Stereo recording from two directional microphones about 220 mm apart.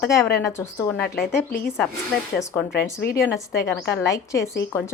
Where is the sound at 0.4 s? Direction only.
10° left (ahead or behind).